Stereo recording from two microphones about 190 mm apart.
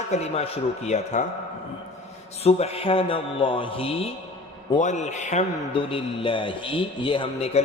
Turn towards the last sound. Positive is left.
turn(degrees=30)  # may be behind; listen again after turning